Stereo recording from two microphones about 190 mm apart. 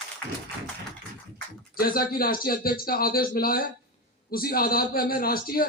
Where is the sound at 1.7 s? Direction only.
50° left (ahead or behind).